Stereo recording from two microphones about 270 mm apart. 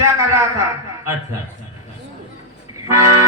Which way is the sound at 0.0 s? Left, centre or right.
Centre.